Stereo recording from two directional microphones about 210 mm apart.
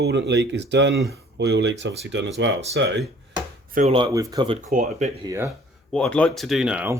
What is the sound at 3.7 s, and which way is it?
Speech, 30° right (ahead or behind).